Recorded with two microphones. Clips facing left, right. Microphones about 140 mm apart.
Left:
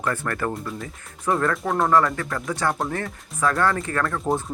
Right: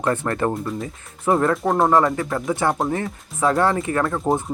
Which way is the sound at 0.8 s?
25° right (ahead or behind).